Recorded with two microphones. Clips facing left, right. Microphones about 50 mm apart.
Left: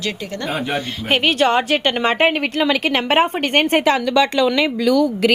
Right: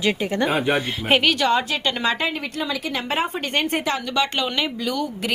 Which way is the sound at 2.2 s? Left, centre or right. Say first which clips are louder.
Left 9 dB; left.